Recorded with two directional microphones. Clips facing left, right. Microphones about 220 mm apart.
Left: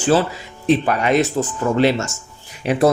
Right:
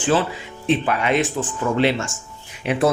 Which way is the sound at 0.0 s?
40° left (ahead or behind).